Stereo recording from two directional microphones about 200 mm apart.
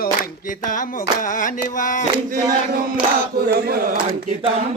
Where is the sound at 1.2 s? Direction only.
40° left (ahead or behind).